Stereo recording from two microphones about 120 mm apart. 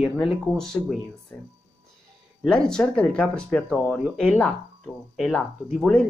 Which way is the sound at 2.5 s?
5° left (ahead or behind).